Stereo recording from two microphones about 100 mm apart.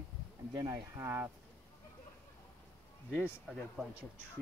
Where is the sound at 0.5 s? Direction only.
35° right (ahead or behind).